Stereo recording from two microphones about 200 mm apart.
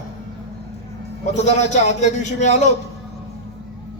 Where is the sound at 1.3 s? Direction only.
35° left (ahead or behind).